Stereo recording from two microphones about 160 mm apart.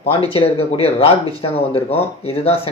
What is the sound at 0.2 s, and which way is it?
Speech, 40° left (ahead or behind).